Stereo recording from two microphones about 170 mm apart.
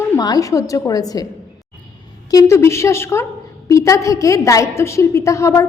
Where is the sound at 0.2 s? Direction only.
20° left (ahead or behind).